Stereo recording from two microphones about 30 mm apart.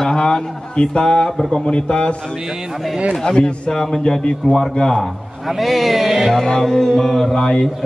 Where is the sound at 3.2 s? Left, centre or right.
Left.